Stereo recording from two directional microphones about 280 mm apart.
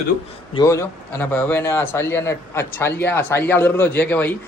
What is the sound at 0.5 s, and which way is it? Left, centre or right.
A man's voice, centre.